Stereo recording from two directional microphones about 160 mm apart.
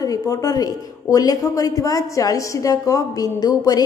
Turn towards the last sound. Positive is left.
turn(degrees=25)  # may be behind; listen again after turning